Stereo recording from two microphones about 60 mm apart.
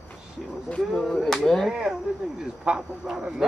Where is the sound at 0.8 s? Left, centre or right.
Centre.